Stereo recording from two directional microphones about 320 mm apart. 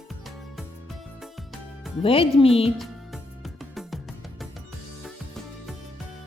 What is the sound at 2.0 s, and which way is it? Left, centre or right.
Speech, centre.